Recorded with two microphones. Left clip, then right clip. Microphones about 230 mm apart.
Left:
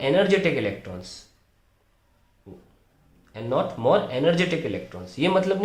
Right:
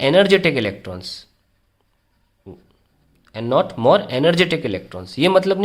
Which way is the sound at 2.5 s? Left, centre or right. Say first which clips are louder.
Right 6 dB; right.